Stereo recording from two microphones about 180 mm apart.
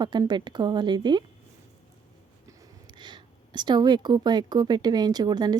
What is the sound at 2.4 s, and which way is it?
Speech, 20° right (ahead or behind).